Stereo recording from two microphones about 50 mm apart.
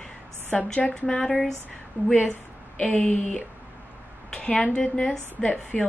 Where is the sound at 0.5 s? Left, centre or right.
Left.